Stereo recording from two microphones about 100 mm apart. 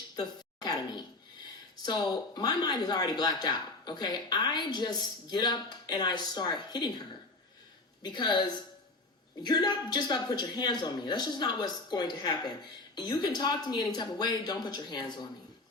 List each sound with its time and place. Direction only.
0.2 s speech: 40° left (ahead or behind)